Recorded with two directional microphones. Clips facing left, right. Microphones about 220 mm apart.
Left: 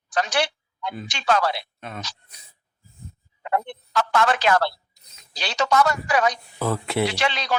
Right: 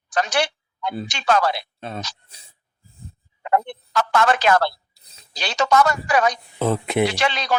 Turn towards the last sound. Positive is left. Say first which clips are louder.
# right 2 dB
turn(degrees=-45)  # may be behind; listen again after turning